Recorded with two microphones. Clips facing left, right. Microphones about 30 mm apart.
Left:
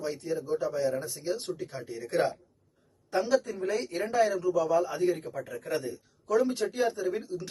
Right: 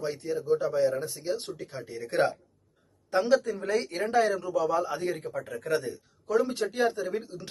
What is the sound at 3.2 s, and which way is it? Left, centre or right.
A man's voice, right.